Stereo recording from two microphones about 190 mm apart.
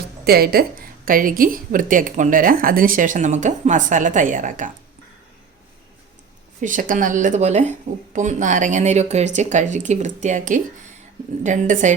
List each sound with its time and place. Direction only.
0.3 s a woman's voice: 55° right (ahead or behind)
6.6 s speech: 45° right (ahead or behind)